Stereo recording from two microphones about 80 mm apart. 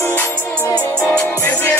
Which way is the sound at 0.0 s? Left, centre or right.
Left.